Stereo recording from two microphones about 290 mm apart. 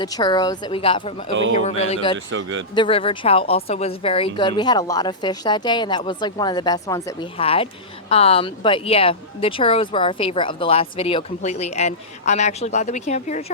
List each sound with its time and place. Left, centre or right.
0.0 s a woman's voice: centre
1.3 s a man's voice: right
1.8 s speech: left
2.1 s a man's voice: right
2.7 s a woman's voice: centre